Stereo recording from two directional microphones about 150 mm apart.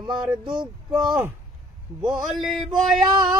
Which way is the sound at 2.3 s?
Centre (ahead or behind).